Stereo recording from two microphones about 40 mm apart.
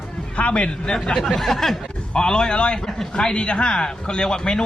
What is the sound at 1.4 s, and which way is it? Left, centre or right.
Speech, centre.